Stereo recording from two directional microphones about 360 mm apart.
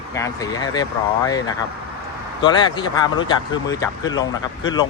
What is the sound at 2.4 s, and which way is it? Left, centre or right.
Speech, centre.